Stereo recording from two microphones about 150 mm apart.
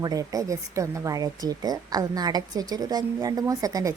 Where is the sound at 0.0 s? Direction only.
25° right (ahead or behind).